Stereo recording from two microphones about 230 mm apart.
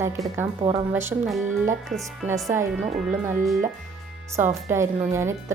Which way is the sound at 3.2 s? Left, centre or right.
Centre.